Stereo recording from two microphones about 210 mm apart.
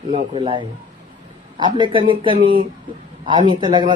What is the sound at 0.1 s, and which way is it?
Speech, 25° right (ahead or behind).